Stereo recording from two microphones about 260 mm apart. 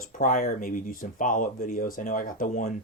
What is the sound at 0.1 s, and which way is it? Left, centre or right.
Speech, left.